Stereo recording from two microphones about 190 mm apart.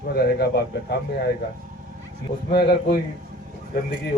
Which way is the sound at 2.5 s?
60° left (ahead or behind).